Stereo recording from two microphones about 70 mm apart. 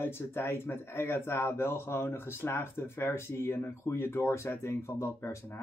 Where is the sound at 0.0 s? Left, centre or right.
Left.